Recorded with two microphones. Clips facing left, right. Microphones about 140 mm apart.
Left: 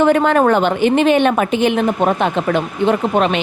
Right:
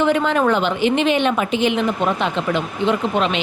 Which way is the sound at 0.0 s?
50° left (ahead or behind).